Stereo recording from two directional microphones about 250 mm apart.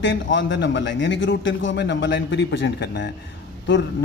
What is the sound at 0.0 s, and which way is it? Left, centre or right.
A man's voice, left.